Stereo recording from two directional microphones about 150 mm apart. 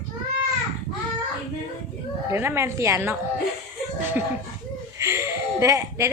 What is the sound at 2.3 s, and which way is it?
Speech, 15° right (ahead or behind).